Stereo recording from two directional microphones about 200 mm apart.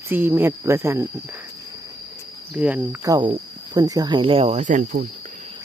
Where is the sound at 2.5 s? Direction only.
5° right (ahead or behind); by 5.1 s 40° right (ahead or behind).